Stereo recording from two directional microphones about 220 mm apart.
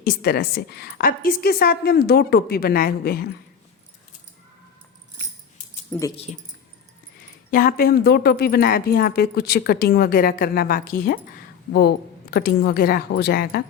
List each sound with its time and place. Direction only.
0.0 s speech: 45° left (ahead or behind)
6.3 s speech: 30° left (ahead or behind)
7.5 s speech: 40° left (ahead or behind)